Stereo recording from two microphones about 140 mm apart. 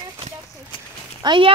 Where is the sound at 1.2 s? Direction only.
35° right (ahead or behind).